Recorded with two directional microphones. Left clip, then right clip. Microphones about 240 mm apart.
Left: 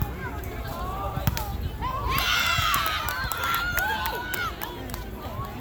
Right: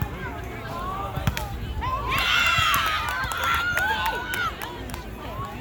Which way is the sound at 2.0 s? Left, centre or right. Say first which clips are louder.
Right 3 dB; centre.